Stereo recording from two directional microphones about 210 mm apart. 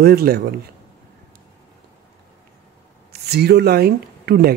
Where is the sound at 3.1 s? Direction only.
50° right (ahead or behind).